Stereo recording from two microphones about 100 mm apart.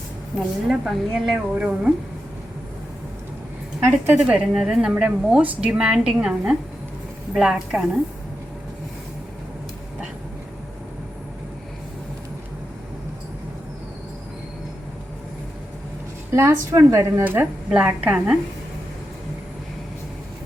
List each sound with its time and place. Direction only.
0.7 s a woman's voice: 5° right (ahead or behind)
3.8 s a woman's voice: 15° right (ahead or behind)
16.3 s speech: 25° right (ahead or behind)
17.2 s a woman's voice: 15° right (ahead or behind)